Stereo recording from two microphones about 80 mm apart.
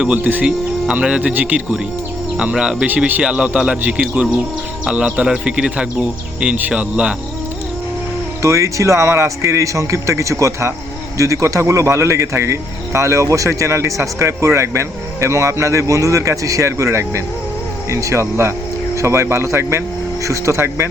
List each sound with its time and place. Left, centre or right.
0.0 s speech: centre
0.4 s speech: centre
2.8 s speech: right
8.4 s speech: right